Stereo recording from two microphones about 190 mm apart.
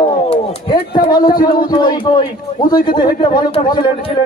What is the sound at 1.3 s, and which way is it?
Speech, 50° left (ahead or behind).